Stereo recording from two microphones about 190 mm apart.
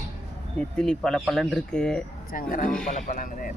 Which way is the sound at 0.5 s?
5° left (ahead or behind).